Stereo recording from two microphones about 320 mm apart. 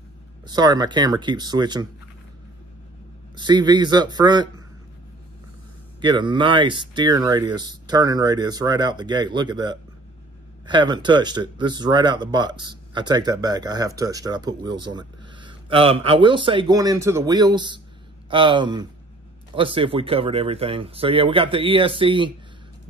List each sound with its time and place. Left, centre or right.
0.5 s speech: centre
3.3 s speech: centre
5.9 s speech: centre